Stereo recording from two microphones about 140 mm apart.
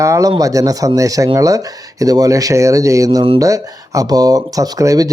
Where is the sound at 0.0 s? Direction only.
25° right (ahead or behind).